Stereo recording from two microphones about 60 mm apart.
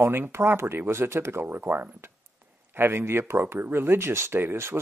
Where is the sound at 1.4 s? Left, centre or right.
Right.